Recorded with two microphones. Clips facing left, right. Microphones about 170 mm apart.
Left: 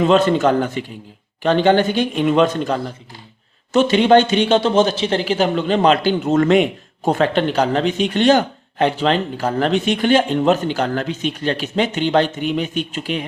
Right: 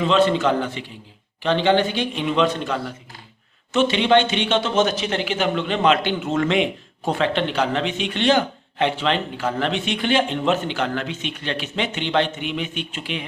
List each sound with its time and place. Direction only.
0.0 s a man's voice: 45° left (ahead or behind)